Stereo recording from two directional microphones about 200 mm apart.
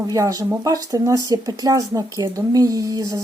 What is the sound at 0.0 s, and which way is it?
Speech, 15° right (ahead or behind).